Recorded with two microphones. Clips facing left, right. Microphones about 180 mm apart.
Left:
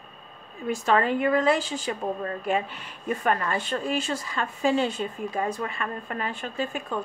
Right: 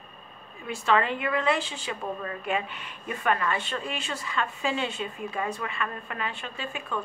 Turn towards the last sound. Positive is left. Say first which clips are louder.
# left 4 dB
turn(degrees=40)  # may be behind; listen again after turning